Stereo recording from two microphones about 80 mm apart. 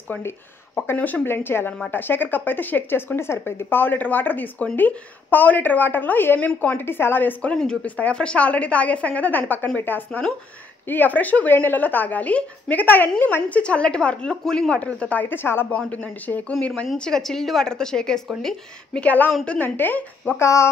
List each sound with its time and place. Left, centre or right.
0.9 s a woman's voice: left
19.0 s speech: left
20.3 s speech: left